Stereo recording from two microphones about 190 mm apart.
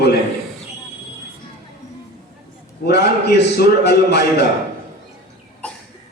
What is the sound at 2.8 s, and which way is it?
Speech, 55° left (ahead or behind).